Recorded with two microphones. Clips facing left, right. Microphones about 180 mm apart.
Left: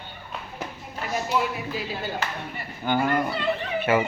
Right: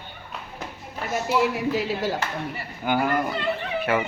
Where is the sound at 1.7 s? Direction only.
75° right (ahead or behind).